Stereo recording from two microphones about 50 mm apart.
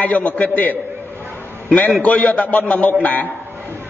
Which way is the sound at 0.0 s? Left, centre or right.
Left.